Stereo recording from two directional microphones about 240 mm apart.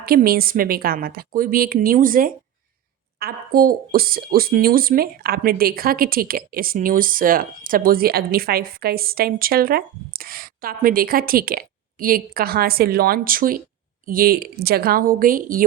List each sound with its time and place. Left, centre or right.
0.0 s speech: right